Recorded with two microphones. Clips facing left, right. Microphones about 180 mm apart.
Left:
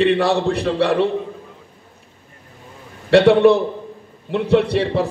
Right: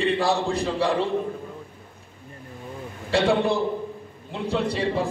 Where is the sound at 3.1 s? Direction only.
65° left (ahead or behind).